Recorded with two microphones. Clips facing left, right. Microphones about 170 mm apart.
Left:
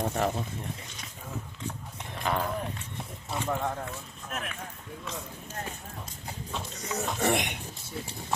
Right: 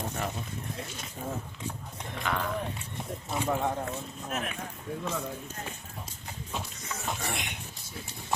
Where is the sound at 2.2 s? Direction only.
30° left (ahead or behind).